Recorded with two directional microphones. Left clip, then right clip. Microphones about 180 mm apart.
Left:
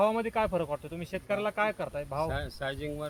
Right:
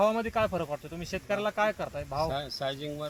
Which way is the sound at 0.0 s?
15° left (ahead or behind).